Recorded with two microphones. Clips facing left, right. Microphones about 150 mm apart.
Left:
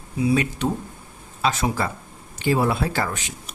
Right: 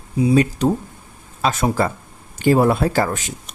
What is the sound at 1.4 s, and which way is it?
Speech, 45° right (ahead or behind).